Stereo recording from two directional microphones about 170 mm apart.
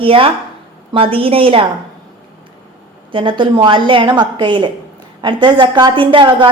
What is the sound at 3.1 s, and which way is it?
A woman's voice, 30° right (ahead or behind).